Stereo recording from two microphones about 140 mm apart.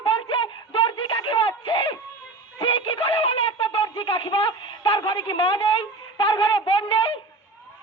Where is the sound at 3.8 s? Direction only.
35° left (ahead or behind).